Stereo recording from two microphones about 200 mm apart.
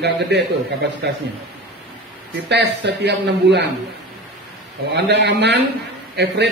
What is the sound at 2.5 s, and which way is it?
A man's voice, 60° right (ahead or behind).